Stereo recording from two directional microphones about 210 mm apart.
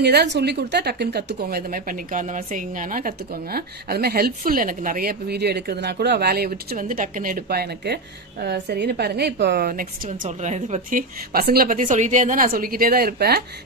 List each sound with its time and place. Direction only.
0.0 s a woman's voice: 50° right (ahead or behind)